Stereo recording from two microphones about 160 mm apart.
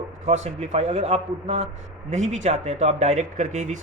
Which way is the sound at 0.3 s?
45° right (ahead or behind).